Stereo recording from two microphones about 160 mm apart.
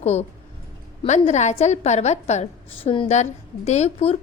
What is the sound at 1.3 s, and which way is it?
A woman's voice, 45° left (ahead or behind).